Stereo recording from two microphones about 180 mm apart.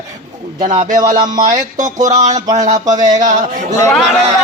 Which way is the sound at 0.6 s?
40° right (ahead or behind).